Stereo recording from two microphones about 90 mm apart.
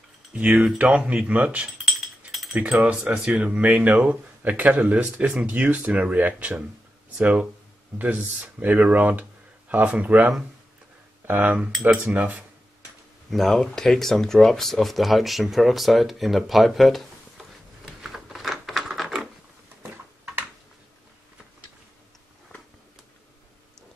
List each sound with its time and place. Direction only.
0.3 s speech: 10° right (ahead or behind)
13.3 s speech: 5° left (ahead or behind)
17.8 s a sound: centre (ahead or behind)